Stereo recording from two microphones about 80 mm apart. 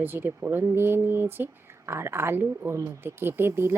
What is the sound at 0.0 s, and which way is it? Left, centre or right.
Speech, right.